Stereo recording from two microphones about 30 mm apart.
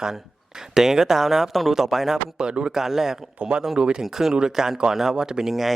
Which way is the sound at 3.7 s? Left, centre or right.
Right.